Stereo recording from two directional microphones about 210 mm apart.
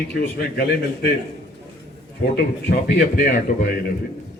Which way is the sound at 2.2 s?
50° left (ahead or behind).